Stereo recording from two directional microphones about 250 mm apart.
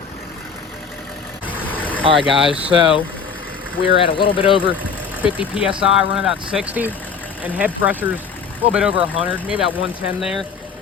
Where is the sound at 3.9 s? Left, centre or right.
Left.